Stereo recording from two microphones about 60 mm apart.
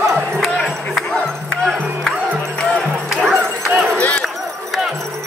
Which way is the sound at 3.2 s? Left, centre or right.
Centre.